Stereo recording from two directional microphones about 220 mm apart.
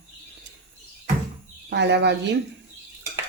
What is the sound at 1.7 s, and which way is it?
Speech, 50° right (ahead or behind).